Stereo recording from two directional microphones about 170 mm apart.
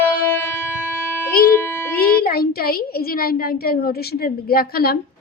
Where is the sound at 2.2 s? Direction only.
60° left (ahead or behind).